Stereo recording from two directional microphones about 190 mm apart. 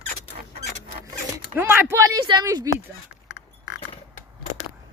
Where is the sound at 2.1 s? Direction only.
20° right (ahead or behind).